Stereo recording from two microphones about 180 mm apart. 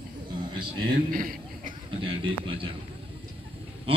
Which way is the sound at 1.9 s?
30° right (ahead or behind).